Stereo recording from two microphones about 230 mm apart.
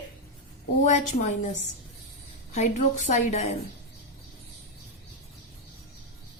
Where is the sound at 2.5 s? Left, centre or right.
Left.